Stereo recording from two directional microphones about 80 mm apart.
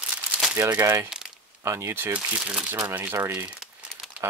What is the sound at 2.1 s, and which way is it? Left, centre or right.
Speech, centre.